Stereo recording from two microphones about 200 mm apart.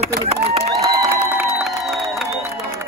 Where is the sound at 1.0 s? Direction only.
15° right (ahead or behind).